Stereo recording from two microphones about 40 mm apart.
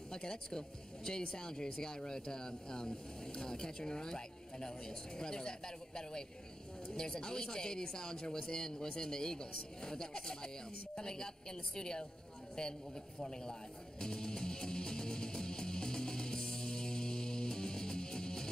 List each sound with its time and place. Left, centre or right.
0.1 s speech: centre
13.2 s music: centre